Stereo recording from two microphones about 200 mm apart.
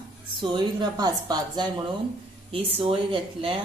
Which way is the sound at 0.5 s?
20° right (ahead or behind).